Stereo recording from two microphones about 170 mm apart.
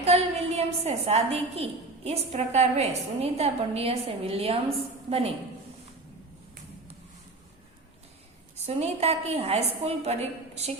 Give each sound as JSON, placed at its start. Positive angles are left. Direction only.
{"t": 0.0, "sound": "a woman's voice", "side_deg": -40}
{"t": 8.6, "sound": "a woman's voice", "side_deg": -40}